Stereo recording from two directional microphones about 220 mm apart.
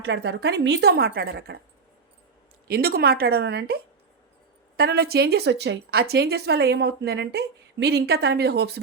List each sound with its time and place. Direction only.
0.0 s a woman's voice: 50° right (ahead or behind)
2.6 s a woman's voice: 45° right (ahead or behind)
4.8 s a woman's voice: 45° right (ahead or behind)